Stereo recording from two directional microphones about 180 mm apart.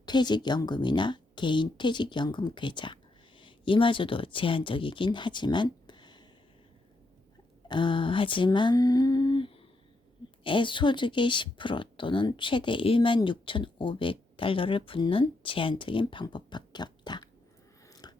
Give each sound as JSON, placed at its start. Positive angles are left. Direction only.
{"t": 0.0, "sound": "speech", "side_deg": 25}
{"t": 7.7, "sound": "speech", "side_deg": 25}
{"t": 17.8, "sound": "biting", "side_deg": 20}